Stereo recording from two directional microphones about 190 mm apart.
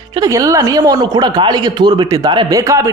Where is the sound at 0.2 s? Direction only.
15° right (ahead or behind).